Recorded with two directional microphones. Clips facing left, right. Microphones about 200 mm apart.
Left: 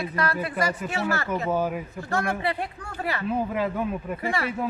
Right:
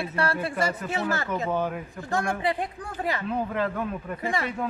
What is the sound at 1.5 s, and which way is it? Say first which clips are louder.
Speech: left 2 dB; 5° left (ahead or behind).